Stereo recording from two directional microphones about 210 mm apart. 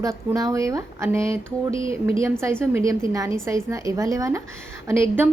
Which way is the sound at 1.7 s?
25° left (ahead or behind).